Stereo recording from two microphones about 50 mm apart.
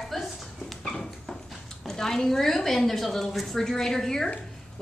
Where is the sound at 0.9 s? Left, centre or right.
Centre.